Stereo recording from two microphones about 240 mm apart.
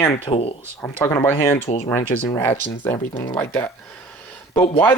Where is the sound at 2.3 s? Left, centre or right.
Centre.